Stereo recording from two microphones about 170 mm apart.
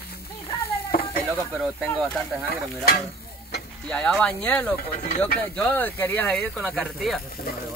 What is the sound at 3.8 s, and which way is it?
Speech, 5° left (ahead or behind).